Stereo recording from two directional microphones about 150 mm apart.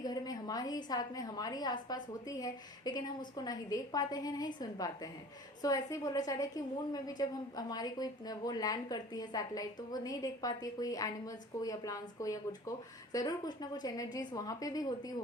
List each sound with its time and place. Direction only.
0.0 s a woman's voice: 25° left (ahead or behind)